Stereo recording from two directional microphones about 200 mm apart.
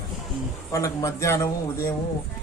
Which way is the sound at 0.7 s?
15° left (ahead or behind).